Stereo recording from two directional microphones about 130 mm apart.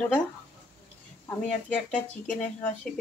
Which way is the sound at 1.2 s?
10° left (ahead or behind).